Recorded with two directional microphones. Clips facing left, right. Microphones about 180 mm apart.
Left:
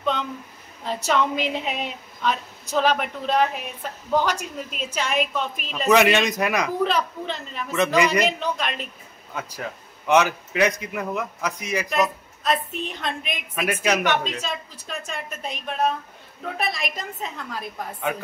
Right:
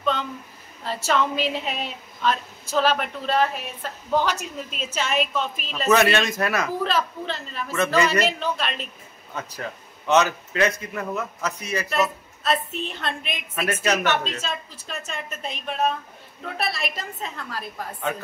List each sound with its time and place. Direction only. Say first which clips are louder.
0.8 s a woman's voice: left 1 dB; 15° left (ahead or behind)